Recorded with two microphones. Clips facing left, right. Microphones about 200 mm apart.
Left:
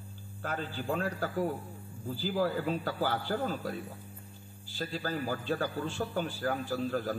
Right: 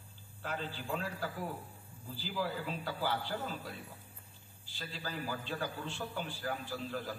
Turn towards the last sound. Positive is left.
turn(degrees=45)  # may be behind; listen again after turning